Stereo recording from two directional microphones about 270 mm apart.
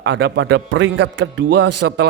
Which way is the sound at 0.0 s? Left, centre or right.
Right.